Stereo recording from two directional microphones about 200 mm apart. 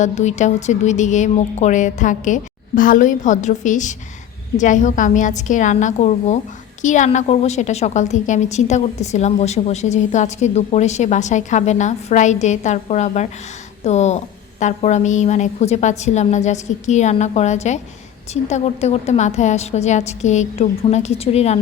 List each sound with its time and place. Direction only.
0.0 s a woman's voice: 35° left (ahead or behind)